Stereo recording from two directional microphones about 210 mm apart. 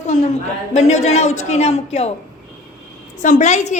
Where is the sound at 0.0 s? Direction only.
35° left (ahead or behind).